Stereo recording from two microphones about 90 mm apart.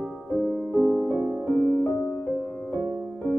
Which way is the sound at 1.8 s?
20° left (ahead or behind).